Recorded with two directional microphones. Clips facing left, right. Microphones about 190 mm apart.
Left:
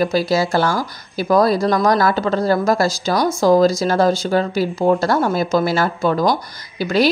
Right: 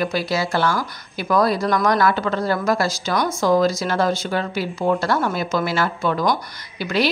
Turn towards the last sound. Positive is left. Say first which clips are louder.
# left 5 dB
turn(degrees=40)  # may be behind; listen again after turning